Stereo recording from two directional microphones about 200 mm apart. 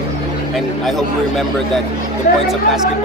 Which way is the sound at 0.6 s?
Centre (ahead or behind).